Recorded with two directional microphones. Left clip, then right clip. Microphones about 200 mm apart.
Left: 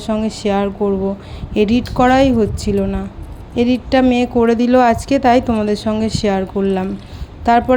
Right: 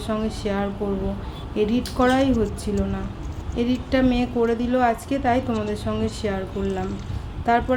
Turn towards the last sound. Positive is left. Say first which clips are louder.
# left 7 dB
turn(degrees=40)  # may be behind; listen again after turning